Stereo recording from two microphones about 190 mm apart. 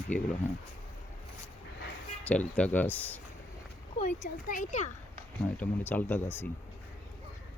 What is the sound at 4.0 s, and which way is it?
Speech, 40° left (ahead or behind).